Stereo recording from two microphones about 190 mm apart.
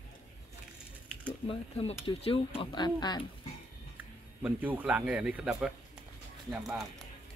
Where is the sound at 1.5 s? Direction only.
30° left (ahead or behind).